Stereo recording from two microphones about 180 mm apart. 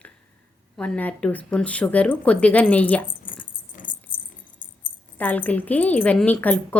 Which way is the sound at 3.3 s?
50° left (ahead or behind).